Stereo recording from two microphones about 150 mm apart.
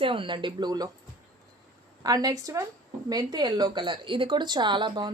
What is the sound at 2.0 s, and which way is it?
A woman's voice, 25° right (ahead or behind).